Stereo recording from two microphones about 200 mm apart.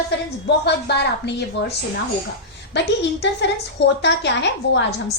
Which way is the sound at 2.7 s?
60° left (ahead or behind).